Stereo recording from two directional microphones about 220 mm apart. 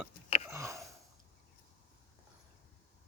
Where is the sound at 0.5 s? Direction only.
15° right (ahead or behind).